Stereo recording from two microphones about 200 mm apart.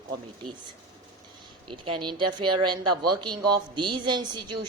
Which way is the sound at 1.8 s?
25° right (ahead or behind).